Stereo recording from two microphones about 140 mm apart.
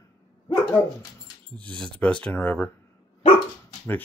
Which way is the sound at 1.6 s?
5° left (ahead or behind).